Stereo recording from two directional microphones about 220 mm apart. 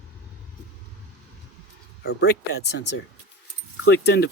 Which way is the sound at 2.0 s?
45° left (ahead or behind).